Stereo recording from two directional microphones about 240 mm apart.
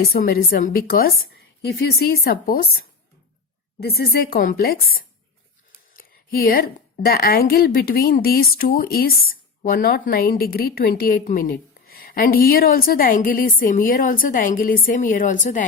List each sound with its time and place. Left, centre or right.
0.1 s a woman's voice: left
3.8 s a woman's voice: left
5.9 s a woman's voice: left